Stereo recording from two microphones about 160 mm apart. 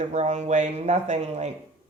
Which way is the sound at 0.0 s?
45° right (ahead or behind).